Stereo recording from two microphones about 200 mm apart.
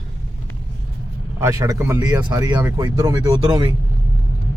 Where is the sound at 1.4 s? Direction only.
15° right (ahead or behind).